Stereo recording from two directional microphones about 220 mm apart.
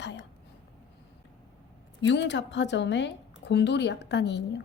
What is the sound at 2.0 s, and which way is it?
A woman's voice, 55° left (ahead or behind).